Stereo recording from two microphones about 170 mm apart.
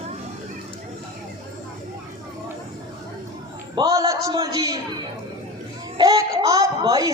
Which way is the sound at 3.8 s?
20° right (ahead or behind).